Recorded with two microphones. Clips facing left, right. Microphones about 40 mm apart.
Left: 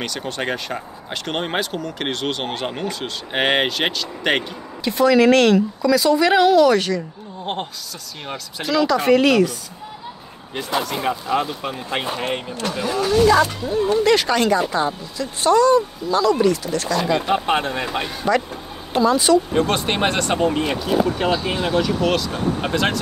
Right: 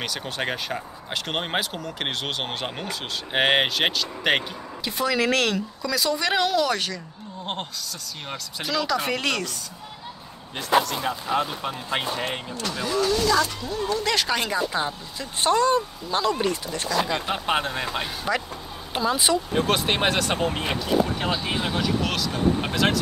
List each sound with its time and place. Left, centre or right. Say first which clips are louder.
0.0 s speech: left 3 dB; centre
8.3 s speech: left 6 dB; centre
11.0 s speech: left 4 dB; centre
14.0 s speech: left 8 dB; centre
14.3 s speech: left 7 dB; centre
15.1 s speech: left 5 dB; right
16.9 s speech: left 5 dB; centre
18.9 s speech: left 7 dB; centre
19.5 s speech: left 3 dB; centre